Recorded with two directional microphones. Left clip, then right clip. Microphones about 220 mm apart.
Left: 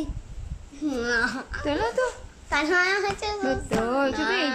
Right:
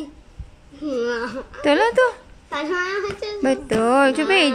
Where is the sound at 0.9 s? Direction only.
20° left (ahead or behind).